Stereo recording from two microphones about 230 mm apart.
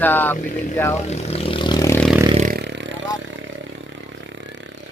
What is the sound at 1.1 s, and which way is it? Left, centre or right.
Vehicle, left.